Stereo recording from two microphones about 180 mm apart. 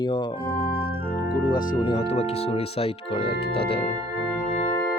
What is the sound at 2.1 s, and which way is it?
Speech, 35° left (ahead or behind).